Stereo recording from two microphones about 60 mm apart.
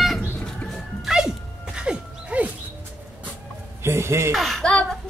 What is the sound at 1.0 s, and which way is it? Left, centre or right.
Music, centre.